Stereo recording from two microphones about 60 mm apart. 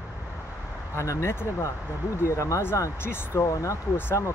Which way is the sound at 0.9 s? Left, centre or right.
Left.